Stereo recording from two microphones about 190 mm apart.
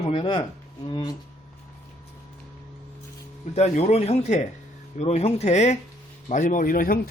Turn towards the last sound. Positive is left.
turn(degrees=50)  # may be behind; listen again after turning